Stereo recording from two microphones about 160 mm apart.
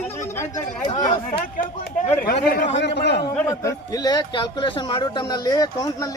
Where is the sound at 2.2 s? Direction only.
75° left (ahead or behind).